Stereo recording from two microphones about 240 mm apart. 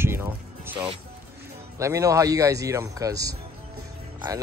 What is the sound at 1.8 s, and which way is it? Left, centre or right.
Speech, centre.